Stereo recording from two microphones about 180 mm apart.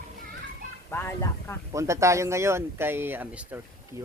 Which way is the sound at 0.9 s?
15° left (ahead or behind).